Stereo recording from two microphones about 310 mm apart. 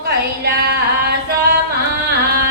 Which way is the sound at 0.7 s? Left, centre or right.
Right.